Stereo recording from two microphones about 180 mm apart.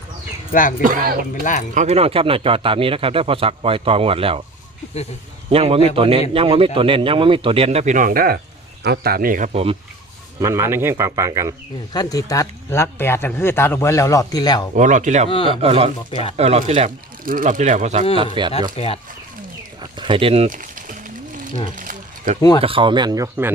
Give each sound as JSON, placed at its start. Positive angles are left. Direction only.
{"t": 0.8, "sound": "speech", "side_deg": -50}
{"t": 1.3, "sound": "speech", "side_deg": 45}
{"t": 1.7, "sound": "a man's voice", "side_deg": -40}
{"t": 5.5, "sound": "a man's voice", "side_deg": -30}
{"t": 10.4, "sound": "speech", "side_deg": -15}
{"t": 11.9, "sound": "speech", "side_deg": 20}
{"t": 14.8, "sound": "a man's voice", "side_deg": -45}
{"t": 17.2, "sound": "speech", "side_deg": -50}
{"t": 18.4, "sound": "speech", "side_deg": -25}
{"t": 18.8, "sound": "speech", "side_deg": 35}
{"t": 19.8, "sound": "speech", "side_deg": -25}
{"t": 20.5, "sound": "a sound", "side_deg": -50}
{"t": 22.4, "sound": "speech", "side_deg": 25}
{"t": 22.6, "sound": "speech", "side_deg": -30}